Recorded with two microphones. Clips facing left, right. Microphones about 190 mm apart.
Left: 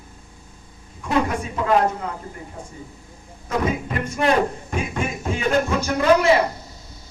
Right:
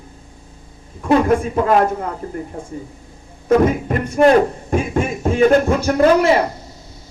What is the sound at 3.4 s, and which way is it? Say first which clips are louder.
Speech: right 9 dB; 50° right (ahead or behind).